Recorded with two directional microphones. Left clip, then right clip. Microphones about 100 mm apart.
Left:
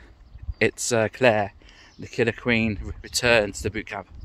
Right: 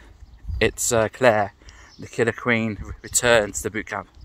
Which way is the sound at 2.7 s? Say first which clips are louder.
Right 2 dB; 65° left (ahead or behind).